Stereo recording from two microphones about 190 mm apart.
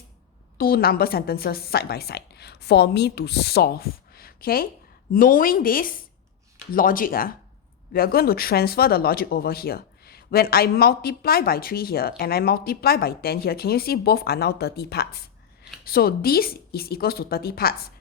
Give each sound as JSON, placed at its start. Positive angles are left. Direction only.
{"t": 0.6, "sound": "a woman's voice", "side_deg": 50}